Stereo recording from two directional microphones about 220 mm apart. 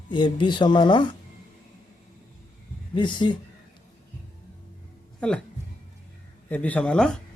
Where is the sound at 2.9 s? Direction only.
20° left (ahead or behind).